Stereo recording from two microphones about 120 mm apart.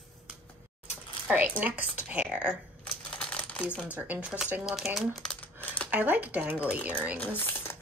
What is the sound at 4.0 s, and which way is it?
Speech, 10° right (ahead or behind).